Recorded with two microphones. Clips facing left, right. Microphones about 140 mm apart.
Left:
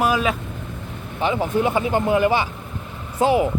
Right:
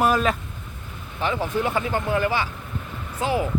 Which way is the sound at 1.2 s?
20° left (ahead or behind).